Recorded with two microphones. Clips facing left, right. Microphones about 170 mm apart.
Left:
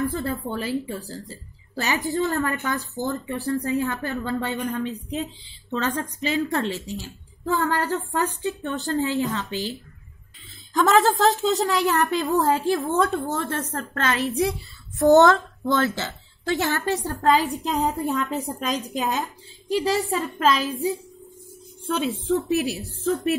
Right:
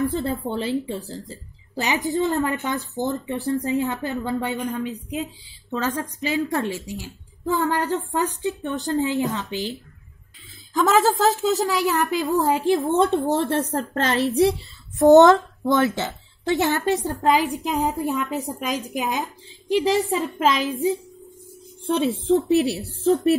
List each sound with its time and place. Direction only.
0.1 s a woman's voice: 20° right (ahead or behind)
10.7 s a woman's voice: 5° right (ahead or behind)
12.4 s a woman's voice: 15° right (ahead or behind); by 14.2 s 30° right (ahead or behind)
15.0 s a woman's voice: 20° right (ahead or behind)
21.9 s a woman's voice: 35° right (ahead or behind)